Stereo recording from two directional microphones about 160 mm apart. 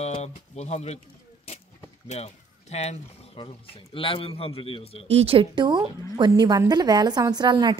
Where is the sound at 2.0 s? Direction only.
40° left (ahead or behind).